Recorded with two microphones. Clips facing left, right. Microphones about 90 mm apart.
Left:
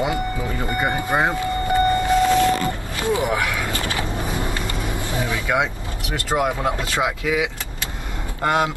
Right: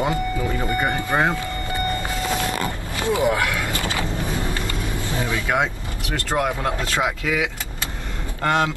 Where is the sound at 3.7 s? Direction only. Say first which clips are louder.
Even; 20° right (ahead or behind).